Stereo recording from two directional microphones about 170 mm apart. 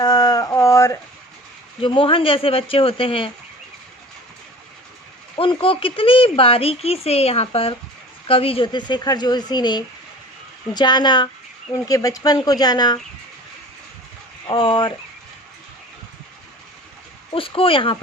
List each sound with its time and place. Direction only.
0.0 s a sound: 25° left (ahead or behind)
1.8 s speech: 30° left (ahead or behind)
5.4 s a woman's voice: 30° left (ahead or behind)
14.4 s a woman's voice: 30° left (ahead or behind)
17.3 s speech: 30° left (ahead or behind)